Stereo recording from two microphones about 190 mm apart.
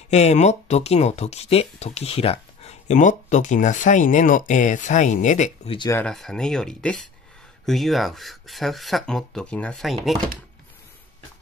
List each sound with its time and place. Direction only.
0.1 s speech: 35° left (ahead or behind)
5.8 s speech: 15° left (ahead or behind)
6.0 s speech: 5° left (ahead or behind)